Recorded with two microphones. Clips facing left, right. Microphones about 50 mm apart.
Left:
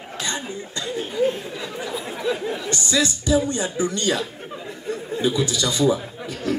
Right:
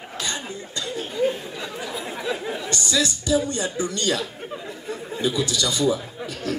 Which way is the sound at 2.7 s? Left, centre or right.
Left.